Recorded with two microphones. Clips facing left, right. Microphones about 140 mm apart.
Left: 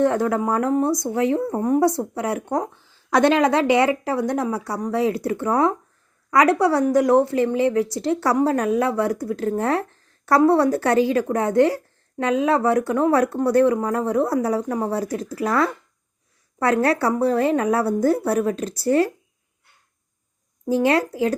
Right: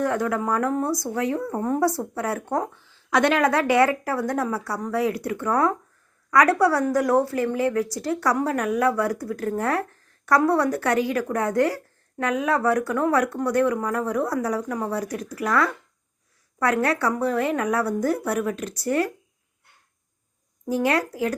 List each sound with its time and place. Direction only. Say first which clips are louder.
0.0 s a woman's voice: left 4 dB; 30° left (ahead or behind)
3.1 s a woman's voice: left 3 dB; 30° left (ahead or behind)
20.7 s a woman's voice: left 4 dB; 30° left (ahead or behind)